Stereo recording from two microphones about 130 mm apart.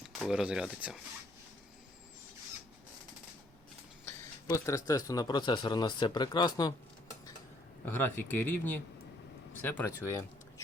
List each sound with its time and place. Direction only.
0.2 s speech: 5° right (ahead or behind)
4.0 s speech: 20° left (ahead or behind)
7.9 s speech: 15° left (ahead or behind)